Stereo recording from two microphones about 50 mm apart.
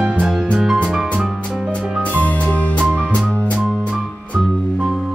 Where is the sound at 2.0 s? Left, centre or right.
Left.